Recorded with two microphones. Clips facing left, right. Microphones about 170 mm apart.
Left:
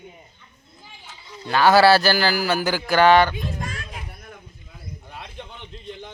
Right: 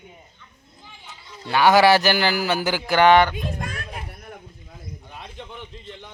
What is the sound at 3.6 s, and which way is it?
Speech, 60° right (ahead or behind).